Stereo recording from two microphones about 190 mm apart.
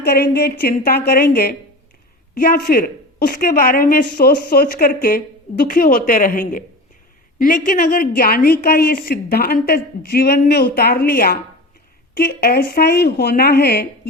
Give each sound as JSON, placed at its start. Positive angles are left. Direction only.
{"t": 0.0, "sound": "a woman's voice", "side_deg": 55}